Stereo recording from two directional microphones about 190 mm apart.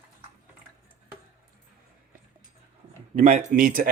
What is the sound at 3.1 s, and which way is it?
Speech, 35° right (ahead or behind).